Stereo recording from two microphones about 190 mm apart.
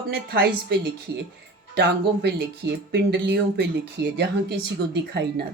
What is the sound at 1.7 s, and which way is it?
A woman's voice, 60° right (ahead or behind).